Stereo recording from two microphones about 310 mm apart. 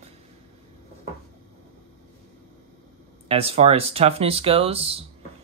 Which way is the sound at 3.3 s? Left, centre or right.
Centre.